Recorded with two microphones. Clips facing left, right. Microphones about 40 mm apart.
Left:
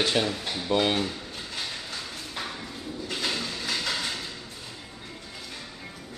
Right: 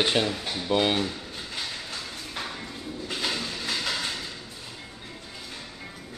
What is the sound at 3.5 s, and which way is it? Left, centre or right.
Train, centre.